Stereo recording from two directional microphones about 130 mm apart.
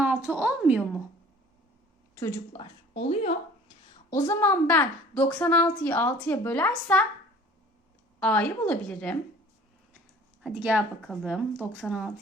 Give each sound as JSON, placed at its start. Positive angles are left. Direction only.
{"t": 0.0, "sound": "a woman's voice", "side_deg": -15}
{"t": 2.6, "sound": "a woman's voice", "side_deg": 45}
{"t": 4.1, "sound": "a woman's voice", "side_deg": 20}
{"t": 8.2, "sound": "a woman's voice", "side_deg": 10}
{"t": 10.5, "sound": "a woman's voice", "side_deg": -10}